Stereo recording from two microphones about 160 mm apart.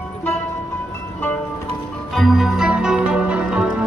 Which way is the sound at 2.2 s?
Centre (ahead or behind).